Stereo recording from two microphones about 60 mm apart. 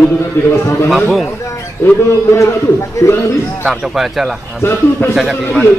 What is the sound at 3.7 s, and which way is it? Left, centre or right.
Speech, centre.